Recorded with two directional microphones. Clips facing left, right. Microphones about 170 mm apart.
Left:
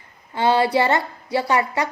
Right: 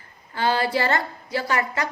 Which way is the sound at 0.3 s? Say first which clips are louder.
Left 5 dB; 25° left (ahead or behind).